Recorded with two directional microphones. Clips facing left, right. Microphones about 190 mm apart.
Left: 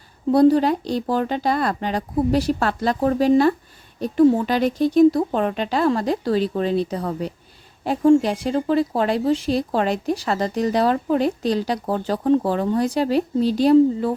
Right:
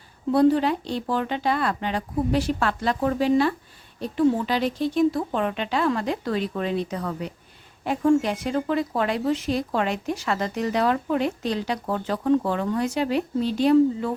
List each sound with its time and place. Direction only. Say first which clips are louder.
0.3 s speech: left 4 dB; 40° left (ahead or behind)